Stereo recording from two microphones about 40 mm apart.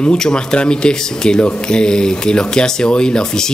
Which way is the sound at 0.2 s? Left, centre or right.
Left.